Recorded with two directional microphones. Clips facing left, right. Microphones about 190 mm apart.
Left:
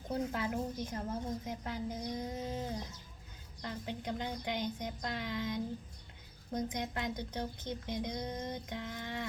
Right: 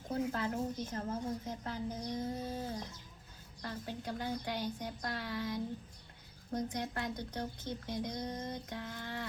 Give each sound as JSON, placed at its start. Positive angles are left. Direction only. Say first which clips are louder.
{"t": 0.1, "sound": "a woman's voice", "louder": "even", "side_deg": 15}